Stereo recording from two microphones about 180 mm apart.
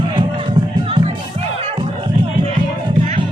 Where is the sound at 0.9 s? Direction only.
30° right (ahead or behind).